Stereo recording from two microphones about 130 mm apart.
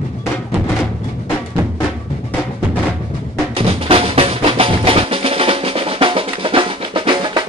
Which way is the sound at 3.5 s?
45° right (ahead or behind).